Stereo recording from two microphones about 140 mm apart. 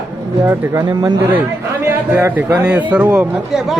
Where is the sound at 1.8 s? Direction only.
15° right (ahead or behind).